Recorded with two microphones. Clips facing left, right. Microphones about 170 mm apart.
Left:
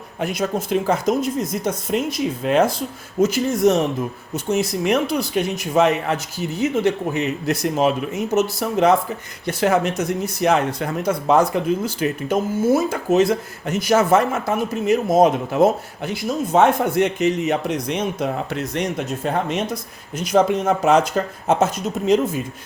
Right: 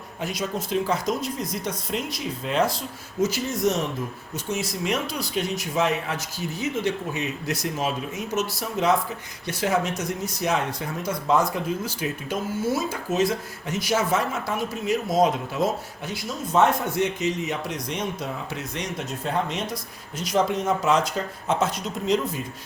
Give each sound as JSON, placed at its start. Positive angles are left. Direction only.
{"t": 0.2, "sound": "speech", "side_deg": 55}
{"t": 9.5, "sound": "speech", "side_deg": 60}
{"t": 21.4, "sound": "speech", "side_deg": 45}